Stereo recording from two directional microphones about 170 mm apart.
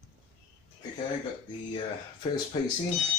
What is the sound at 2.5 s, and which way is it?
Speech, 30° left (ahead or behind).